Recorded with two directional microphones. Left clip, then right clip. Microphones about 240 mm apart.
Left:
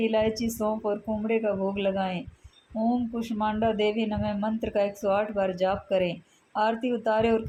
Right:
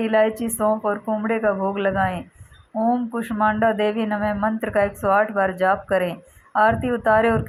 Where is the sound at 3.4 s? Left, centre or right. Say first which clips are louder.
Right 7 dB; centre.